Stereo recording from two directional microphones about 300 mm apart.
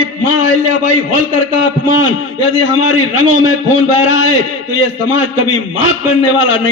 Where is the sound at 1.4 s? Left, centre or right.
Left.